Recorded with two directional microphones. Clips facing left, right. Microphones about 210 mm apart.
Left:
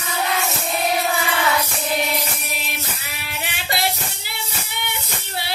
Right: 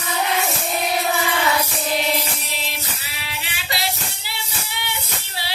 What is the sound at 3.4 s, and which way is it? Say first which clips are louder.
Music: left 4 dB; 55° left (ahead or behind).